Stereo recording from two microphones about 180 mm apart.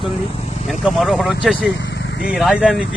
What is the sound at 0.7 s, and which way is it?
Speech, centre (ahead or behind).